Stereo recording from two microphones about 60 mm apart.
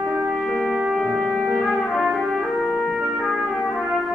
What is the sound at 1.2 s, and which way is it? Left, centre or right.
Trumpet, centre.